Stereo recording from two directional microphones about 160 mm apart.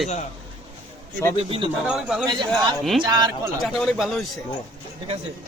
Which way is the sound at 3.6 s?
Centre (ahead or behind).